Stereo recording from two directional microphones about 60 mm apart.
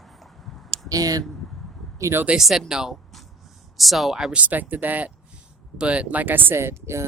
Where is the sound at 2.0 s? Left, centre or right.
Right.